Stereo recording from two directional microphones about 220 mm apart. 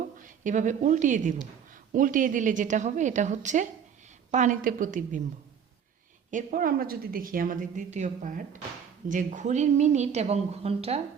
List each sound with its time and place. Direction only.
0.0 s a woman's voice: 35° right (ahead or behind)
6.3 s a woman's voice: 40° right (ahead or behind)